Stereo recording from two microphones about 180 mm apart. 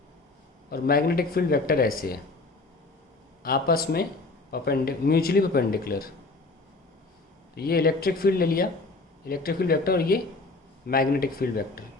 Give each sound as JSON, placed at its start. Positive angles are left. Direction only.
{"t": 0.7, "sound": "speech", "side_deg": 55}
{"t": 3.4, "sound": "speech", "side_deg": 55}
{"t": 7.5, "sound": "speech", "side_deg": 60}